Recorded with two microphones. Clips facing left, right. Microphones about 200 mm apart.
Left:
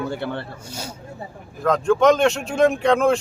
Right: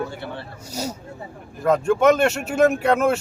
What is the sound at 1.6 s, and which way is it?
Speech, 10° right (ahead or behind).